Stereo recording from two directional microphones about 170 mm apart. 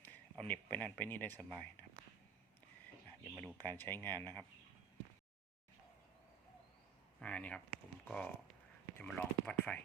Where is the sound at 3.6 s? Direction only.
10° left (ahead or behind).